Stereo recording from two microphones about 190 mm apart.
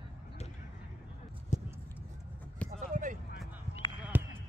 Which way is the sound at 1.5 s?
40° left (ahead or behind).